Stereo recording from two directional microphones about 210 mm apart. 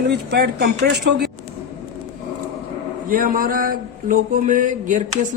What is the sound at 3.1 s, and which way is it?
A woman's voice, 40° right (ahead or behind).